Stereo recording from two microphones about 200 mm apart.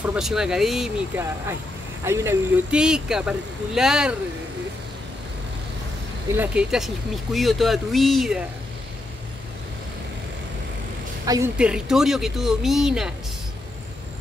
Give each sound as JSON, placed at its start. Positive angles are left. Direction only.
{"t": 0.0, "sound": "speech", "side_deg": -5}
{"t": 2.0, "sound": "speech", "side_deg": -15}
{"t": 6.3, "sound": "speech", "side_deg": -5}
{"t": 11.2, "sound": "a woman's voice", "side_deg": -15}
{"t": 11.5, "sound": "speech", "side_deg": -5}